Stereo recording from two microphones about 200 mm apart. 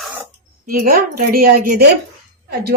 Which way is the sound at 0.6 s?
45° right (ahead or behind).